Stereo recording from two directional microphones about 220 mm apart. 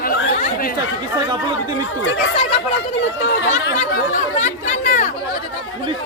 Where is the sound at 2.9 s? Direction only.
55° left (ahead or behind).